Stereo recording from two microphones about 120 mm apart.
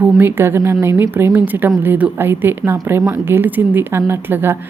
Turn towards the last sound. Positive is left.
turn(degrees=-20)  # may be behind; listen again after turning